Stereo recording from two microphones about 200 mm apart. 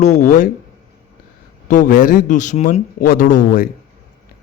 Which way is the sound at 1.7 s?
40° left (ahead or behind).